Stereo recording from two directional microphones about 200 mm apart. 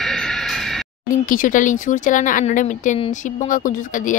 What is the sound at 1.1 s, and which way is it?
Speech, 40° left (ahead or behind).